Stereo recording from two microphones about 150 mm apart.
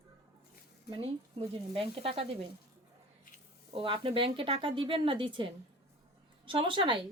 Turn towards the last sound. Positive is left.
turn(degrees=-35)  # may be behind; listen again after turning